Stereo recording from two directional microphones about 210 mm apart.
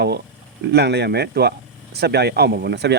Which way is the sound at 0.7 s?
50° right (ahead or behind).